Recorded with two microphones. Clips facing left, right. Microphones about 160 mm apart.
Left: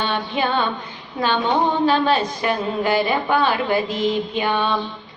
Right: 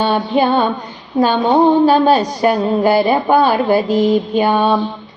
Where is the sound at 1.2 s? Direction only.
40° right (ahead or behind).